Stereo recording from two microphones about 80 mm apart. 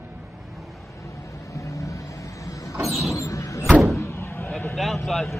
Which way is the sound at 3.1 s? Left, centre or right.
Left.